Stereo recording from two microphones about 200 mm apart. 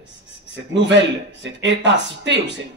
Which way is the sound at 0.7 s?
60° right (ahead or behind).